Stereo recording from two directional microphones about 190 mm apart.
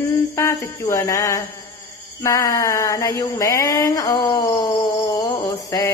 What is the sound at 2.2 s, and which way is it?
Speech, 15° left (ahead or behind).